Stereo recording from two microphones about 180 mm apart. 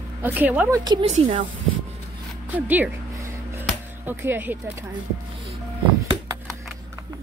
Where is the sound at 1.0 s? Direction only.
35° right (ahead or behind).